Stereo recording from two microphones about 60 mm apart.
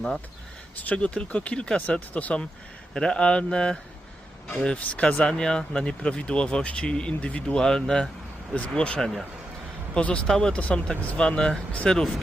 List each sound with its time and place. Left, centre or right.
0.8 s speech: left
9.0 s speech: centre
9.9 s speech: centre